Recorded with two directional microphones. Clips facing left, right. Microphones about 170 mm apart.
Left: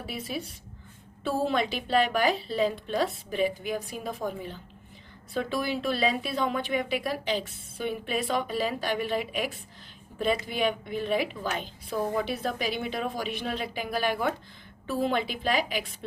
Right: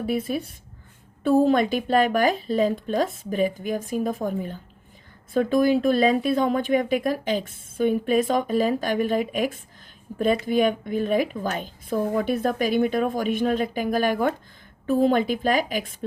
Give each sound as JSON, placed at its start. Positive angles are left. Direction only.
{"t": 0.0, "sound": "speech", "side_deg": -50}